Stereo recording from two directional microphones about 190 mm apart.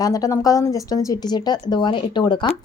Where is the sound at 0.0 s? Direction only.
20° left (ahead or behind).